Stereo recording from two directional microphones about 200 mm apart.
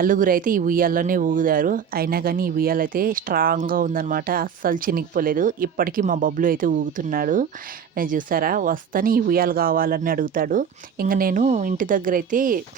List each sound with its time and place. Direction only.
0.0 s speech: 45° right (ahead or behind)